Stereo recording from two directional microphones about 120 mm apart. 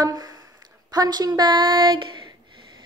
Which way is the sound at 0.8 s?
30° right (ahead or behind).